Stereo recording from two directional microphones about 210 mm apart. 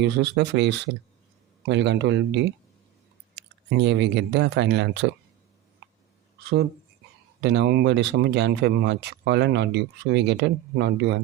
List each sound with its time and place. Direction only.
0.0 s speech: 55° right (ahead or behind)
7.4 s speech: 55° right (ahead or behind)